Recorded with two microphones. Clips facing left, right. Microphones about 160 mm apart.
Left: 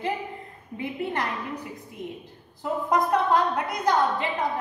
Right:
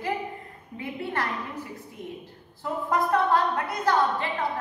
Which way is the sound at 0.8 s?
20° left (ahead or behind).